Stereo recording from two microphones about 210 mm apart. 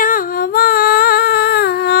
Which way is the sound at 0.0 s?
40° left (ahead or behind).